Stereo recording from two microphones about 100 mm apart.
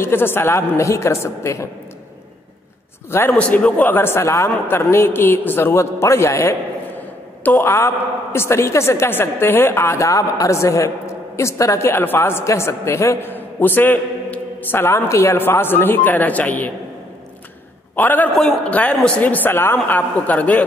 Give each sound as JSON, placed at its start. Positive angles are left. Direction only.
{"t": 0.0, "sound": "a woman's voice", "side_deg": 20}
{"t": 3.1, "sound": "a woman's voice", "side_deg": 25}
{"t": 3.3, "sound": "a woman's voice", "side_deg": 10}
{"t": 17.9, "sound": "a man's voice", "side_deg": 20}
{"t": 18.3, "sound": "a man's voice", "side_deg": 5}
{"t": 18.7, "sound": "a man's voice", "side_deg": 15}